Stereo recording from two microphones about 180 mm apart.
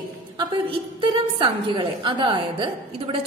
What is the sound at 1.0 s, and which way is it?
A woman's voice, 25° right (ahead or behind).